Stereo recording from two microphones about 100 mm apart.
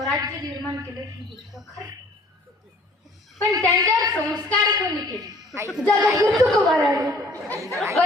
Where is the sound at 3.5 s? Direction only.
40° right (ahead or behind).